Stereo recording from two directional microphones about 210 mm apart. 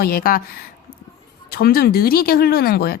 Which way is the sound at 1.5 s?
45° left (ahead or behind).